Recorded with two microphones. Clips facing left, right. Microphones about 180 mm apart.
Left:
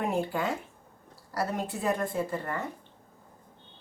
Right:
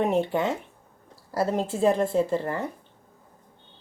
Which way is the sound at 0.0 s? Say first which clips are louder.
Right 6 dB; 20° right (ahead or behind).